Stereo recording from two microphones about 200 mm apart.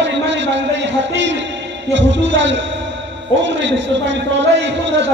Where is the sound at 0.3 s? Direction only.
65° right (ahead or behind).